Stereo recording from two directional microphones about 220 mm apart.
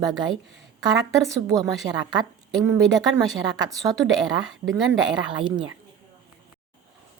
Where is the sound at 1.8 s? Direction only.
15° right (ahead or behind).